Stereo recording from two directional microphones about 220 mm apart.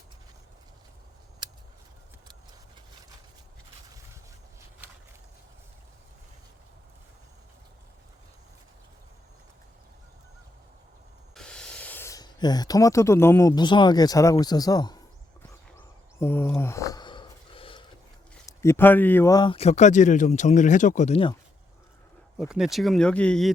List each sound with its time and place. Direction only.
11.3 s speech: 5° left (ahead or behind)
16.1 s a sound: 10° left (ahead or behind)
18.4 s speech: 10° left (ahead or behind)
22.4 s speech: centre (ahead or behind)